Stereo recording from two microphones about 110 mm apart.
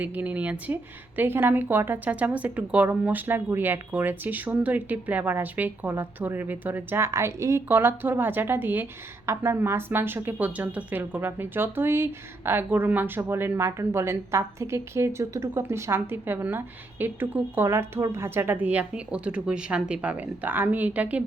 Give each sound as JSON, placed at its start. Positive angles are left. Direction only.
{"t": 0.0, "sound": "speech", "side_deg": -15}